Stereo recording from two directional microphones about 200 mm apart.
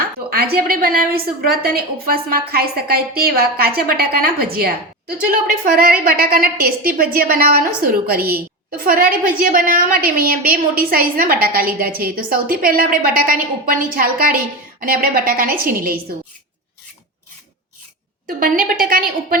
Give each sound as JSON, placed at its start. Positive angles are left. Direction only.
{"t": 0.3, "sound": "a woman's voice", "side_deg": -50}
{"t": 18.3, "sound": "a woman's voice", "side_deg": -45}